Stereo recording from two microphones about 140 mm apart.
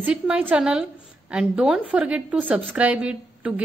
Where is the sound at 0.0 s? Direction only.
10° right (ahead or behind).